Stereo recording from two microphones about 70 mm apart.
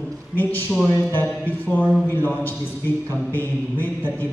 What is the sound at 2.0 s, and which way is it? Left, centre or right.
Speech, left.